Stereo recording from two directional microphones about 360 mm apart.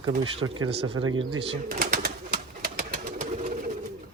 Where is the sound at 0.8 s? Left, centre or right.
Centre.